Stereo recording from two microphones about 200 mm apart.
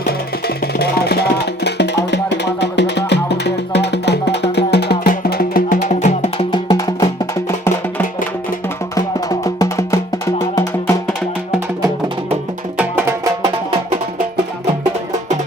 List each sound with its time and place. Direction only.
0.0 s music: 50° left (ahead or behind); by 6.4 s 35° left (ahead or behind)
6.5 s music: 20° left (ahead or behind)
9.0 s music: 15° left (ahead or behind)
11.8 s music: 25° right (ahead or behind)
12.7 s music: 10° right (ahead or behind)